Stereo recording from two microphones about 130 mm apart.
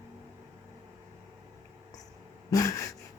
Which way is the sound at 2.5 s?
25° left (ahead or behind).